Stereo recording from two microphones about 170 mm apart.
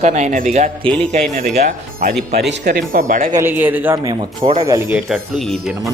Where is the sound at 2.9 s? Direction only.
55° right (ahead or behind).